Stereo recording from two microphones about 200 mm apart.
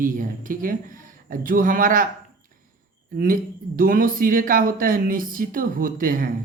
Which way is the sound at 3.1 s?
45° right (ahead or behind).